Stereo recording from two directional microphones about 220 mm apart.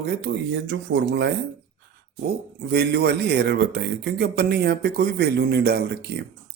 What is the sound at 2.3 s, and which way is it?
Speech, 45° right (ahead or behind).